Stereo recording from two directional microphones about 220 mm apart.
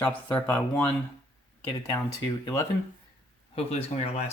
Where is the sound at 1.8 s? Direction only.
15° left (ahead or behind).